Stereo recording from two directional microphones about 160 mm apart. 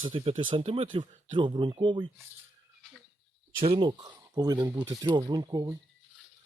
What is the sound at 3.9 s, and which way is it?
Speech, 25° right (ahead or behind).